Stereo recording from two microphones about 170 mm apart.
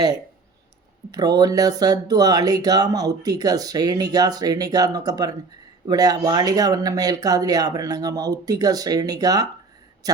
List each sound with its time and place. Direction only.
1.1 s speech: 25° right (ahead or behind)